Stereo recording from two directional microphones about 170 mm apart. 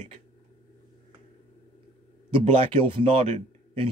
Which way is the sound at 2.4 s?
35° right (ahead or behind).